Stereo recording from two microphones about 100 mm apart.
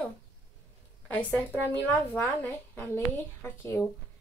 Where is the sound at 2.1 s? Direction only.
15° left (ahead or behind).